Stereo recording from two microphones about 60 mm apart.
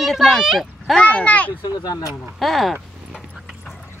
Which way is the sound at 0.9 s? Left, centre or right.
Left.